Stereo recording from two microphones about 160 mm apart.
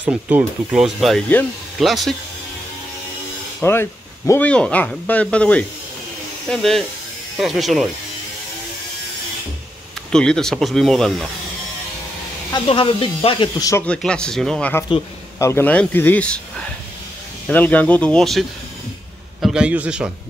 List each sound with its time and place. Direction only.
0.0 s speech: 10° right (ahead or behind)
3.6 s speech: 15° left (ahead or behind)
10.1 s speech: 5° left (ahead or behind)
12.5 s speech: 35° left (ahead or behind)
13.8 s speech: 5° left (ahead or behind)
14.9 s speech: 20° left (ahead or behind); by 18.4 s 5° left (ahead or behind)
19.4 s speech: 5° right (ahead or behind)